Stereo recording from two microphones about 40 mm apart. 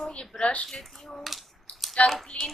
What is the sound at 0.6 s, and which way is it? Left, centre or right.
Speech, centre.